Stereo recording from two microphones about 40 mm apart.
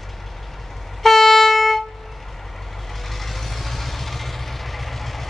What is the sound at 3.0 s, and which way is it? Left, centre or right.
Vehicle, centre.